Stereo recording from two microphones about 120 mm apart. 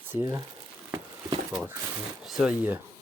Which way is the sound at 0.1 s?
25° right (ahead or behind).